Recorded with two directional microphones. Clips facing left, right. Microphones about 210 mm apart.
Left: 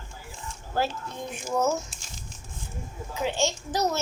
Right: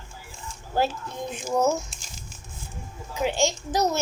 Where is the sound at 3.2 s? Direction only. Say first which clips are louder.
Right 3 dB; 10° right (ahead or behind).